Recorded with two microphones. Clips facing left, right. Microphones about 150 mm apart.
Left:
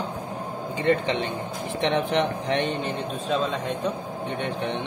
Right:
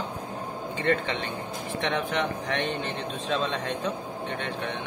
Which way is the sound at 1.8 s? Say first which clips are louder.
Left 5 dB; 25° left (ahead or behind).